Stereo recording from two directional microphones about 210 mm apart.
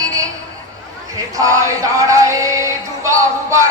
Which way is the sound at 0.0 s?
15° right (ahead or behind).